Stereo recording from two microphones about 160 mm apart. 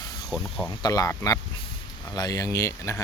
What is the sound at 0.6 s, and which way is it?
Speech, 20° left (ahead or behind).